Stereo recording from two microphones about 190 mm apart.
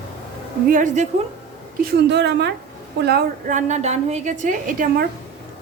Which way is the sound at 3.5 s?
40° right (ahead or behind).